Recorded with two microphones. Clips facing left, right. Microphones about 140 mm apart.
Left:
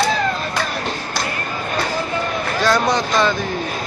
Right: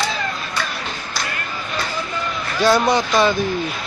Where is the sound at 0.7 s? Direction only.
45° left (ahead or behind).